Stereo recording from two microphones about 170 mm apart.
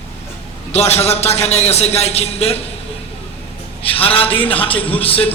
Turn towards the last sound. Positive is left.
turn(degrees=35)  # may be behind; listen again after turning